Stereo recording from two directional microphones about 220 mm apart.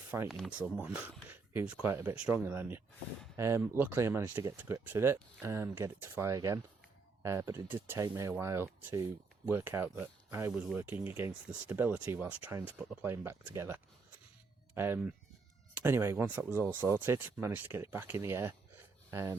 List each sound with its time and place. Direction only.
0.1 s speech: 5° right (ahead or behind)